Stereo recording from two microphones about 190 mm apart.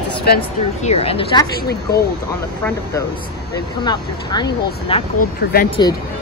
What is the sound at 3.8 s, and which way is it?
A woman's voice, 20° left (ahead or behind).